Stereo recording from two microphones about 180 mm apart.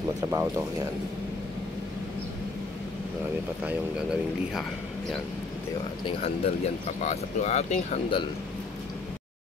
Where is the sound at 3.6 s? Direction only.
5° right (ahead or behind).